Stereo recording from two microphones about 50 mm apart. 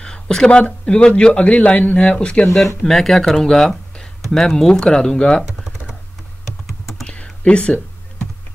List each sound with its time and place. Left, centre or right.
0.0 s a sound: centre
0.5 s a man's voice: left
2.4 s speech: centre
7.4 s a man's voice: left